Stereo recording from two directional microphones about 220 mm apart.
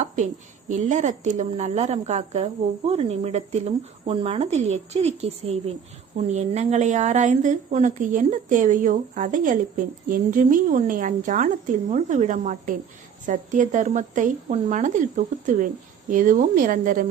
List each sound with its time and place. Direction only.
0.7 s a woman's voice: 35° right (ahead or behind)